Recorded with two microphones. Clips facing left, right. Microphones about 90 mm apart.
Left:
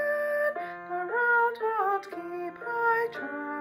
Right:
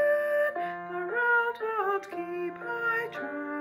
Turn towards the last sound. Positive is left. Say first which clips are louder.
# even
turn(degrees=5)  # may be behind; listen again after turning